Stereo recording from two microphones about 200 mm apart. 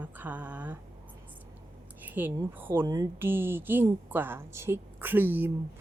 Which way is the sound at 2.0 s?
10° right (ahead or behind).